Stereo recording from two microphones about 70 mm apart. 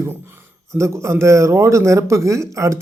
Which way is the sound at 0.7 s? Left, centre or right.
Right.